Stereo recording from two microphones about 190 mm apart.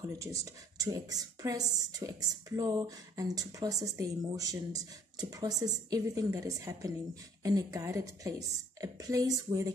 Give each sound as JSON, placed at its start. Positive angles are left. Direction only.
{"t": 0.1, "sound": "a woman's voice", "side_deg": -15}